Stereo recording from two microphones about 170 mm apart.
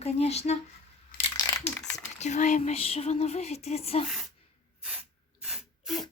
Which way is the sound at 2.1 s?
45° left (ahead or behind).